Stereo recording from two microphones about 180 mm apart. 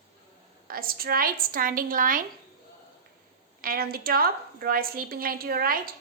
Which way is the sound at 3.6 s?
55° right (ahead or behind).